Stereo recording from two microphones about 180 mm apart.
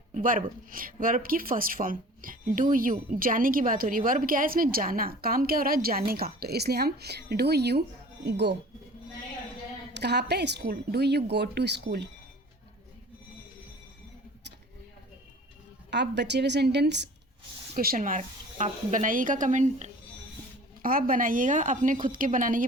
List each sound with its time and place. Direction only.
0.1 s speech: 50° right (ahead or behind); by 8.5 s 65° right (ahead or behind)
9.9 s a woman's voice: 70° right (ahead or behind)
15.9 s a woman's voice: 70° right (ahead or behind)
17.7 s speech: 50° right (ahead or behind)
20.8 s speech: 50° right (ahead or behind)